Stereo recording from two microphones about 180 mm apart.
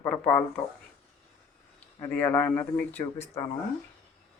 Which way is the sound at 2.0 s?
10° left (ahead or behind).